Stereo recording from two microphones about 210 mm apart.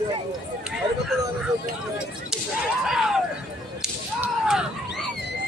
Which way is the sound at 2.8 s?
Centre (ahead or behind).